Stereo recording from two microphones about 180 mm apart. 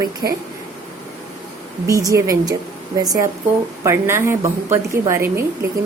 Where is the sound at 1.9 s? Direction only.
20° right (ahead or behind).